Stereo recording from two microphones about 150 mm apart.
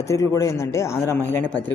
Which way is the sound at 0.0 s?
20° left (ahead or behind).